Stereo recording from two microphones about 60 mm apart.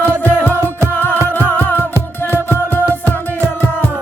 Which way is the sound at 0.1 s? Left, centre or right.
Left.